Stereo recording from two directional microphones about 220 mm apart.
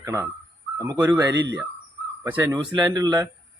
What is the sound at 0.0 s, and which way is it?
Speech, 15° right (ahead or behind).